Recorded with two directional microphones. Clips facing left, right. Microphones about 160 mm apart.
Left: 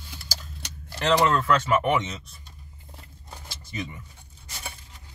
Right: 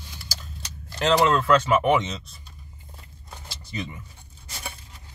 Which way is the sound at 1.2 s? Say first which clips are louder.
Right 2 dB; 20° right (ahead or behind).